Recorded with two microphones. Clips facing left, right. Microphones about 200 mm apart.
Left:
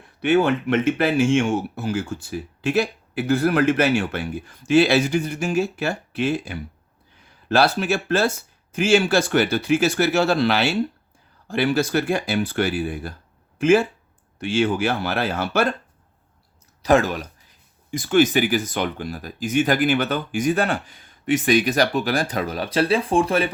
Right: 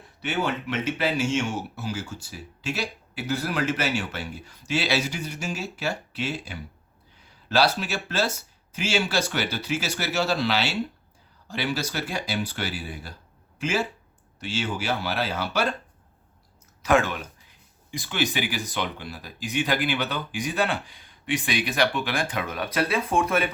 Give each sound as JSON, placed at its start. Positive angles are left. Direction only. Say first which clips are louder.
{"t": 0.2, "sound": "speech", "louder": "left 9 dB", "side_deg": 55}
{"t": 16.8, "sound": "speech", "louder": "left 4 dB", "side_deg": 35}